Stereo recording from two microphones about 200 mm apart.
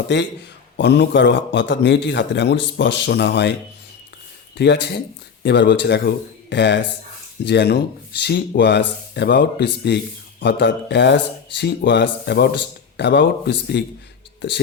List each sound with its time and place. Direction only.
0.8 s a man's voice: 60° left (ahead or behind)
4.5 s a man's voice: 60° left (ahead or behind)